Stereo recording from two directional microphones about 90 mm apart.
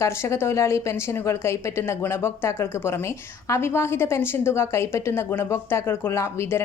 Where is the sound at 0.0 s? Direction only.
30° left (ahead or behind).